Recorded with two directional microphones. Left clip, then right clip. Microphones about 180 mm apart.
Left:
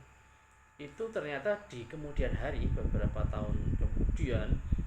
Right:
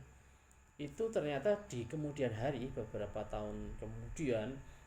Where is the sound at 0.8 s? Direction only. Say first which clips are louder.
Even; 25° right (ahead or behind).